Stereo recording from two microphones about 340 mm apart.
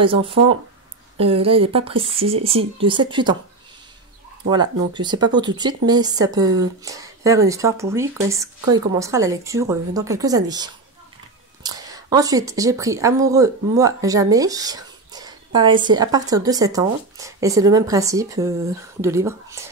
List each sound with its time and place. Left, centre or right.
0.0 s speech: centre
4.5 s speech: centre